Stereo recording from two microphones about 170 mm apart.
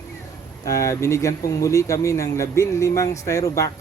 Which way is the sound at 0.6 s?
20° left (ahead or behind).